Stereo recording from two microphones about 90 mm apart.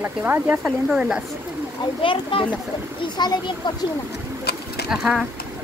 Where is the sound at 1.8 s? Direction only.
70° left (ahead or behind).